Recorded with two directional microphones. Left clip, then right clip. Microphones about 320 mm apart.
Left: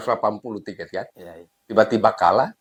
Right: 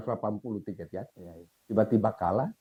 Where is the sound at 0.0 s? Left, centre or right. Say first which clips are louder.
Left 11 dB; centre.